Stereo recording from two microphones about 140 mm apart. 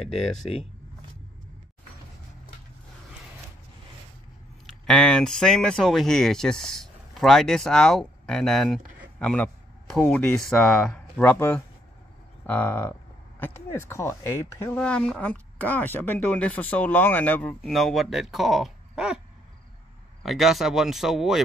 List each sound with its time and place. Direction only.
4.6 s a woman's voice: centre (ahead or behind); by 14.8 s 20° left (ahead or behind)
14.8 s a woman's voice: 5° left (ahead or behind)
17.7 s speech: centre (ahead or behind)
20.2 s speech: centre (ahead or behind)